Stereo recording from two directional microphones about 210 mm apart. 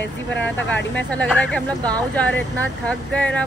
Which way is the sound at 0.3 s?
5° left (ahead or behind).